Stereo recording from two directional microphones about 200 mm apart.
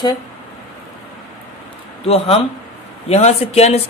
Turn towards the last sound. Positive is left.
turn(degrees=30)  # may be behind; listen again after turning